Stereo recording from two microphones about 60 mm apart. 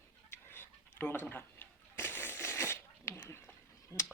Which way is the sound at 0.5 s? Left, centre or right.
Left.